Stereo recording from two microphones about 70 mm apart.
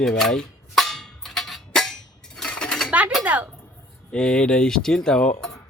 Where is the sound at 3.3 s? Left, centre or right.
Right.